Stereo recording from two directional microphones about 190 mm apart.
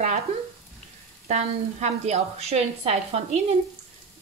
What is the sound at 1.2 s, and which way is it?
Speech, 35° right (ahead or behind).